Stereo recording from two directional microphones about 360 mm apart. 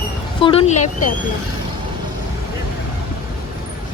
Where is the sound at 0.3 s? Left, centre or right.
Centre.